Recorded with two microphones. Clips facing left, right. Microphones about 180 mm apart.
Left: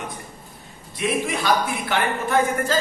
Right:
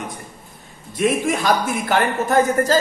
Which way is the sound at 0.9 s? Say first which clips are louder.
Right 5 dB; 45° right (ahead or behind).